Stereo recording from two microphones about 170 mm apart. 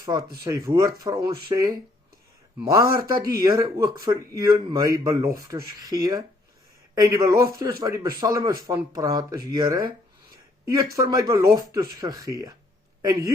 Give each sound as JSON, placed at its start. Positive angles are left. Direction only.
{"t": 0.0, "sound": "speech", "side_deg": -20}
{"t": 10.9, "sound": "speech", "side_deg": -20}